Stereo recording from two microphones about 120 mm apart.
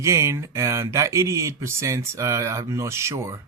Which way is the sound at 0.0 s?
25° right (ahead or behind).